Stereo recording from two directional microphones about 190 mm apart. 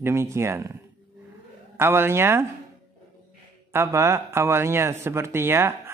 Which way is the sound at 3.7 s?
15° right (ahead or behind).